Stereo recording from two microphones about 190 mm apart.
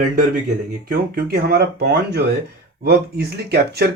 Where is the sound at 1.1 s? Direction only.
55° right (ahead or behind).